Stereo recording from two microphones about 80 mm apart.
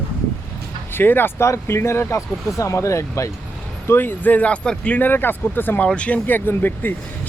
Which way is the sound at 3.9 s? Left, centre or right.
Left.